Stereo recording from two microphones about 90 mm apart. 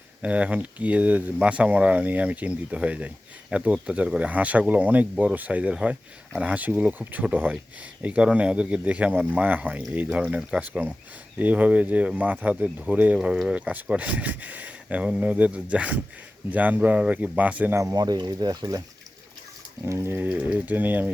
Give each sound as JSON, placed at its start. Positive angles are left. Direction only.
{"t": 0.2, "sound": "speech", "side_deg": -15}
{"t": 17.9, "sound": "speech", "side_deg": -45}
{"t": 19.8, "sound": "speech", "side_deg": -30}